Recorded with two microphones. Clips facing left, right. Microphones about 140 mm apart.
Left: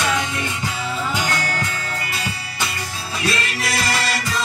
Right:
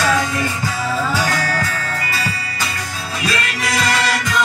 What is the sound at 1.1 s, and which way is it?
Music, 20° left (ahead or behind).